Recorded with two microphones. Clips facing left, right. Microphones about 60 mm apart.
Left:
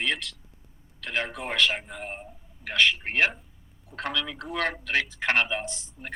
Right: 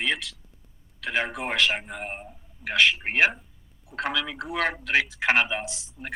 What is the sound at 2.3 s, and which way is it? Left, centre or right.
A man's voice, centre.